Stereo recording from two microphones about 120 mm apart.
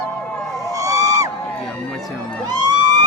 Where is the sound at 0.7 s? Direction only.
30° right (ahead or behind).